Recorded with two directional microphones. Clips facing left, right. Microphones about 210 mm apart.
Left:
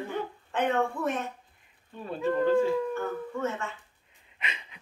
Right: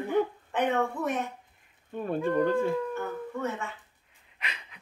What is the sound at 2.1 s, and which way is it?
Speech, 55° right (ahead or behind).